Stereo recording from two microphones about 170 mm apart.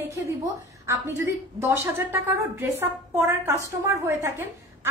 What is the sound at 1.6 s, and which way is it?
A woman's voice, 15° right (ahead or behind).